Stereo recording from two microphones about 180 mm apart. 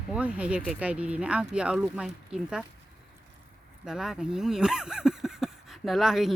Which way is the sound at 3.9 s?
5° right (ahead or behind).